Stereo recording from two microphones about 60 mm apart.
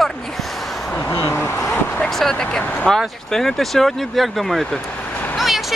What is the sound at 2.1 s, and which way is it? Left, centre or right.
Speech, centre.